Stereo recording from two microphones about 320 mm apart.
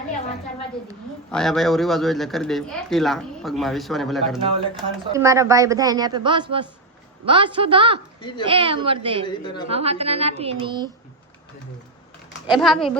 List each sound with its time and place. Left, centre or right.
1.3 s speech: centre
4.4 s speech: centre
9.2 s a woman's voice: centre
9.6 s a woman's voice: centre
12.5 s speech: centre